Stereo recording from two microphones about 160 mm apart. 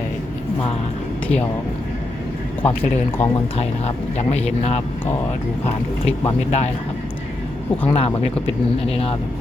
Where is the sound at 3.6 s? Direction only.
40° left (ahead or behind).